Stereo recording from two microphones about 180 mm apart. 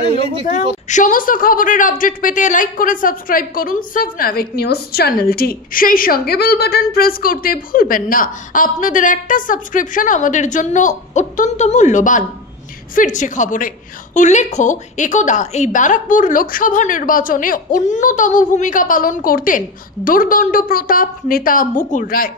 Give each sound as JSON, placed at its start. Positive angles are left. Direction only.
{"t": 0.8, "sound": "a woman's voice", "side_deg": 45}